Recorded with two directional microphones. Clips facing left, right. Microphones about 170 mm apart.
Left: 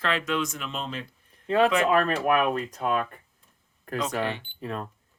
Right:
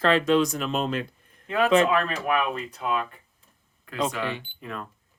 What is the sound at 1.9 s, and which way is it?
Speech, 45° left (ahead or behind).